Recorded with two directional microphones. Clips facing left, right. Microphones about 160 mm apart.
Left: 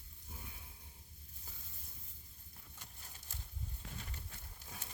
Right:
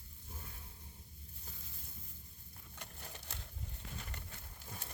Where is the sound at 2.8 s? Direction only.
70° right (ahead or behind).